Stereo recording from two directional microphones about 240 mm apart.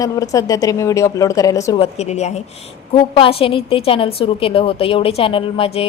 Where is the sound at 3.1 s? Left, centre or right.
Left.